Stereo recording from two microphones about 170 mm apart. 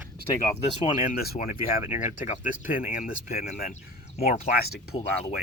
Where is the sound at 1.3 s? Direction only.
45° left (ahead or behind).